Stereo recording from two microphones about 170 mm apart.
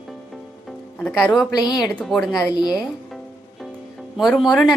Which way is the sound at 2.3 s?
25° left (ahead or behind).